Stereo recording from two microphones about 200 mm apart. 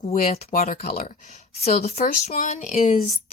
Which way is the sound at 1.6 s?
30° left (ahead or behind).